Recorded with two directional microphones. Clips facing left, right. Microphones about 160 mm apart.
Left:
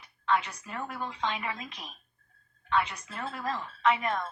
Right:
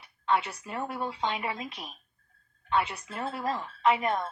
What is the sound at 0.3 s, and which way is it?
A woman's voice, 30° right (ahead or behind).